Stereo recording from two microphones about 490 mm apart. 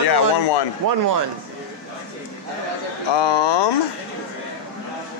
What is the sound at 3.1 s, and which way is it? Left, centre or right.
Speech, left.